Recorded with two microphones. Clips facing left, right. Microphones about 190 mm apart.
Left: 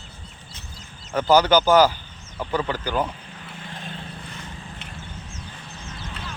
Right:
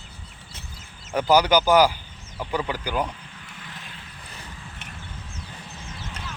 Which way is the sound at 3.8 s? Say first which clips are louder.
Left 8 dB; 30° left (ahead or behind).